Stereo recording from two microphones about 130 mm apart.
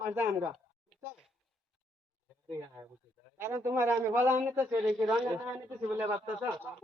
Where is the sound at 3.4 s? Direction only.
20° right (ahead or behind).